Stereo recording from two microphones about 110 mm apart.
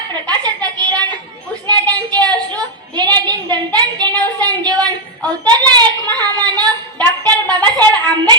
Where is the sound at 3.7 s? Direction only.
15° left (ahead or behind).